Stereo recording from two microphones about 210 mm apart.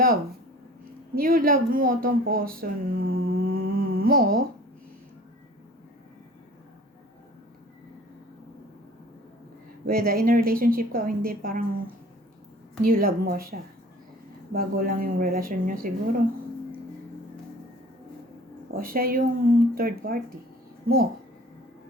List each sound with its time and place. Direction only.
1.1 s speech: 45° right (ahead or behind)
9.8 s a woman's voice: 45° right (ahead or behind)
12.8 s a woman's voice: 45° right (ahead or behind)
14.5 s a woman's voice: 45° right (ahead or behind)
18.7 s a woman's voice: 45° right (ahead or behind)